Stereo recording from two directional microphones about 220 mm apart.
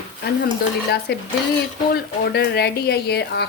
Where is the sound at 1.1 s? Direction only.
50° left (ahead or behind).